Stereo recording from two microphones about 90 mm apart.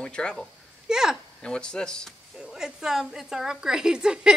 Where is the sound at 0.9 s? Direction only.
5° right (ahead or behind).